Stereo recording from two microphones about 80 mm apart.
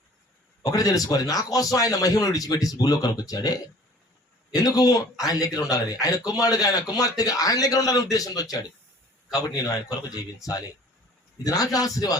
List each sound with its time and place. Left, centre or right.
0.6 s a man's voice: left